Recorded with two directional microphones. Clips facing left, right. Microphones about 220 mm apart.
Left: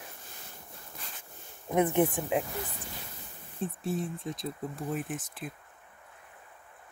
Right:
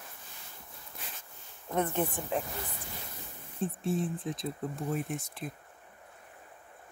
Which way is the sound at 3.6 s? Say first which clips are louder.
Right 1 dB; centre (ahead or behind).